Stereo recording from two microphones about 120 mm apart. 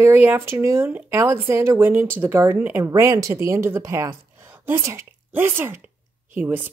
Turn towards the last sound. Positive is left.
turn(degrees=-15)  # may be behind; listen again after turning